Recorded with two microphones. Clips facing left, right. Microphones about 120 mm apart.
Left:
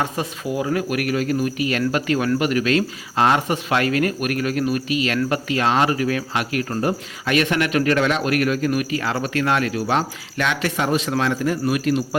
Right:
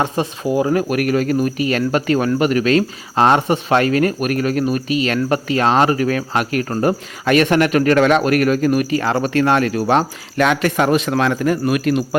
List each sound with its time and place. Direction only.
0.0 s speech: 30° right (ahead or behind); by 12.0 s 65° right (ahead or behind)